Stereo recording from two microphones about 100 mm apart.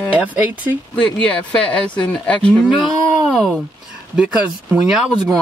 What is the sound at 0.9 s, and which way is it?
Speech, 10° left (ahead or behind).